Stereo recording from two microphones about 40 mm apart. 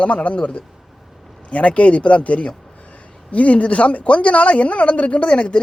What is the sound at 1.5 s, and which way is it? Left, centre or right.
Speech, left.